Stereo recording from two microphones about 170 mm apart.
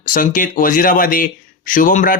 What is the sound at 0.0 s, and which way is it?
Speech, 55° left (ahead or behind).